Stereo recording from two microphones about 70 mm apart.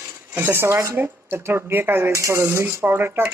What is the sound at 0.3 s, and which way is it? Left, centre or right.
Speech, right.